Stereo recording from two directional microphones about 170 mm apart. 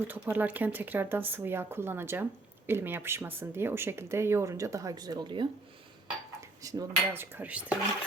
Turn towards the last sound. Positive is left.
turn(degrees=-10)  # may be behind; listen again after turning